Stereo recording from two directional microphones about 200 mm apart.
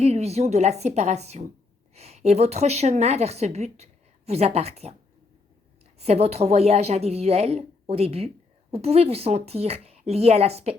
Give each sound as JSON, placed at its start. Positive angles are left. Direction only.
{"t": 0.0, "sound": "speech", "side_deg": -30}